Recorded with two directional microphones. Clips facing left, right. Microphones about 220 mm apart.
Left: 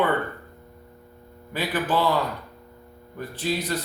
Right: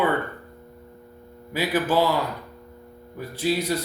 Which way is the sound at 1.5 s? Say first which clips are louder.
Right 3 dB; 10° right (ahead or behind).